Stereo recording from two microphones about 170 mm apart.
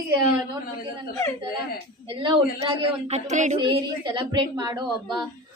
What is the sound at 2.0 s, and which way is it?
A woman's voice, 30° right (ahead or behind).